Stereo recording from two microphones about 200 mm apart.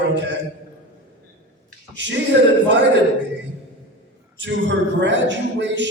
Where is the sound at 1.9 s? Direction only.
65° right (ahead or behind).